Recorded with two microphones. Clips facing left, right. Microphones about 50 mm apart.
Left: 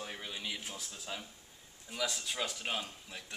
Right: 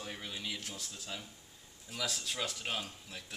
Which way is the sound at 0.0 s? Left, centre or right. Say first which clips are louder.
Even; centre.